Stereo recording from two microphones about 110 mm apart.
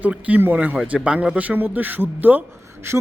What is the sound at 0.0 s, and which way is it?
Speech, 15° right (ahead or behind).